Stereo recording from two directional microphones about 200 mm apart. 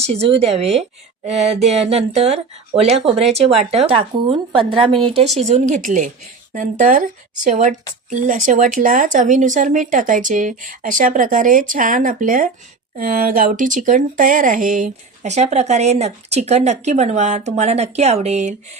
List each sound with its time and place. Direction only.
0.0 s speech: 30° right (ahead or behind)